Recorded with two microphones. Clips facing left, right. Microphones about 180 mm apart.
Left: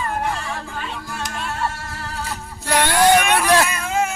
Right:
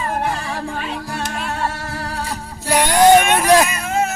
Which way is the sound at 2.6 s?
10° right (ahead or behind).